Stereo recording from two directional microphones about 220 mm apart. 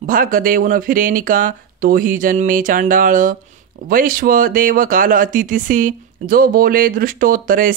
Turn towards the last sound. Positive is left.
turn(degrees=-40)  # may be behind; listen again after turning